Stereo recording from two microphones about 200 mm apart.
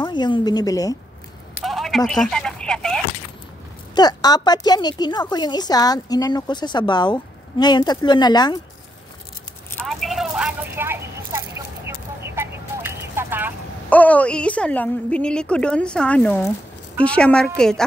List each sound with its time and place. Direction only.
0.0 s a woman's voice: 20° left (ahead or behind)
1.5 s a sound: centre (ahead or behind)
3.9 s a woman's voice: 20° left (ahead or behind)
9.8 s vehicle: centre (ahead or behind)
13.8 s a woman's voice: 5° left (ahead or behind)